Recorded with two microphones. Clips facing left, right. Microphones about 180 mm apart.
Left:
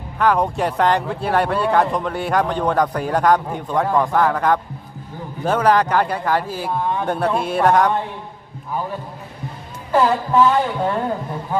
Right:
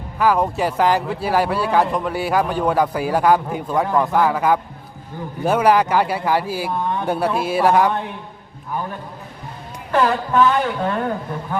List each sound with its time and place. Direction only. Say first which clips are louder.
0.2 s a man's voice: even; 5° right (ahead or behind)
9.9 s speech: left 1 dB; 15° left (ahead or behind)